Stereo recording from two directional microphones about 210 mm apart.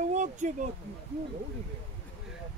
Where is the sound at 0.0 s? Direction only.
35° right (ahead or behind).